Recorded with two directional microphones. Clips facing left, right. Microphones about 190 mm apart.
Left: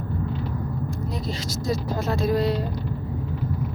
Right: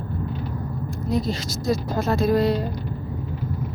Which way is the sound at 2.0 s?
45° right (ahead or behind).